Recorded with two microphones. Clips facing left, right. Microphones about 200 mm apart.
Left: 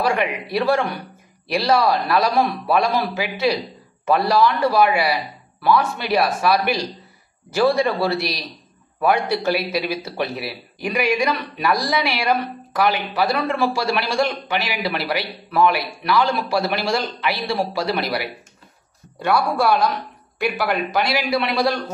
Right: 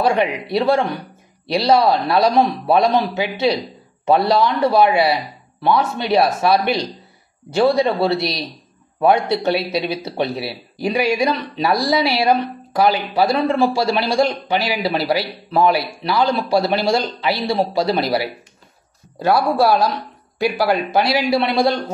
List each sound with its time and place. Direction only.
0.0 s a man's voice: 25° right (ahead or behind)